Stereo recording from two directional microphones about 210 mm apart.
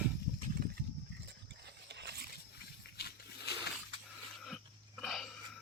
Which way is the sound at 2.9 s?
50° left (ahead or behind).